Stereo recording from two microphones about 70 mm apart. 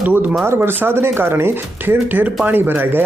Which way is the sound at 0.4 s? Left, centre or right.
Right.